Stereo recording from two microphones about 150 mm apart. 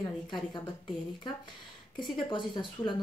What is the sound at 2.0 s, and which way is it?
Speech, 30° left (ahead or behind).